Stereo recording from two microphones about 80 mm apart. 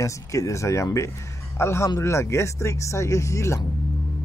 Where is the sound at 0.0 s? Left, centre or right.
Left.